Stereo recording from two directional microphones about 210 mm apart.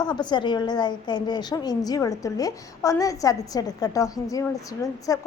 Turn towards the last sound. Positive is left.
turn(degrees=15)  # may be behind; listen again after turning